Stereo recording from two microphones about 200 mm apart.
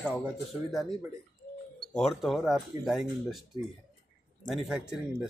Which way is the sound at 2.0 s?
Centre (ahead or behind).